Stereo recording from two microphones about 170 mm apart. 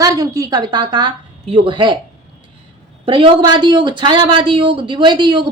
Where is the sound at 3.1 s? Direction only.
30° right (ahead or behind).